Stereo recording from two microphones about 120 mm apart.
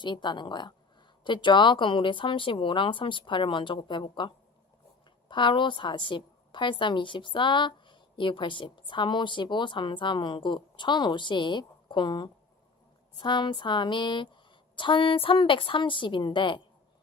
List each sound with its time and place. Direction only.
0.0 s a woman's voice: 40° left (ahead or behind)